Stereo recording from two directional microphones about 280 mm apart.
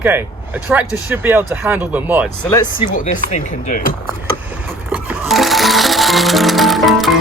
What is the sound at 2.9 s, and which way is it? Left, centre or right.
Speech, left.